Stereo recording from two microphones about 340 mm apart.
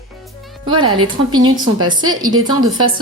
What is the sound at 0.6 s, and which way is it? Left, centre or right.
A woman's voice, centre.